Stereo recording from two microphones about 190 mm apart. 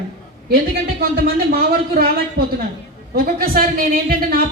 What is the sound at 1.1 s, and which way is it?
Speech, 50° right (ahead or behind).